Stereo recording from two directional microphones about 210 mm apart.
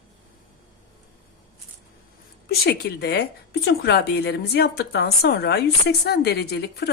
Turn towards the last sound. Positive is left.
turn(degrees=50)  # may be behind; listen again after turning